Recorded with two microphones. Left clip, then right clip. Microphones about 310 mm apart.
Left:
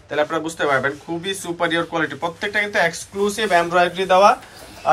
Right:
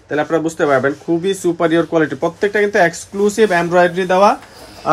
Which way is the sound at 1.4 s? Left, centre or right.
Right.